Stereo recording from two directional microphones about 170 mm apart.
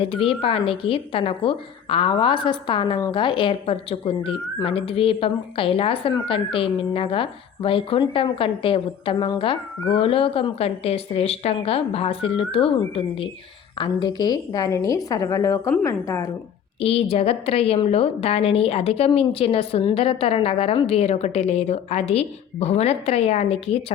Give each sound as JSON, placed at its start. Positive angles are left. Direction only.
{"t": 0.0, "sound": "a woman's voice", "side_deg": 35}
{"t": 16.8, "sound": "a woman's voice", "side_deg": 35}